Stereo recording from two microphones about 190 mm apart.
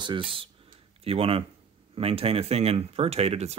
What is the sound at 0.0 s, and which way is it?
Speech, 25° right (ahead or behind).